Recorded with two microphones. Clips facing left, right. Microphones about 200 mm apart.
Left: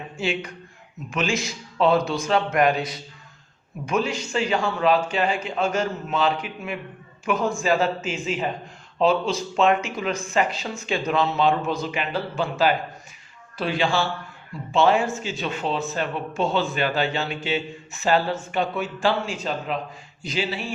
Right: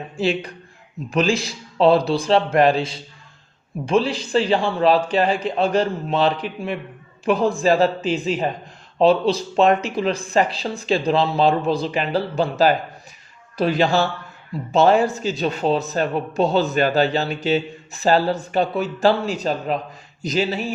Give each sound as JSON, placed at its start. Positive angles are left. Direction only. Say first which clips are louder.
{"t": 0.2, "sound": "speech", "louder": "right 5 dB", "side_deg": -35}